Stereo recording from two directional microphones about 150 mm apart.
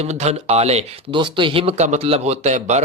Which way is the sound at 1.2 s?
35° right (ahead or behind).